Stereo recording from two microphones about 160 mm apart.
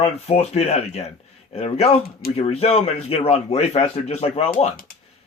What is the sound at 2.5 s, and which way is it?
Speech, 40° left (ahead or behind).